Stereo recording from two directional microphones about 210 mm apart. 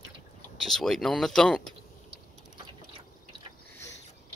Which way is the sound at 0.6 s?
Centre (ahead or behind).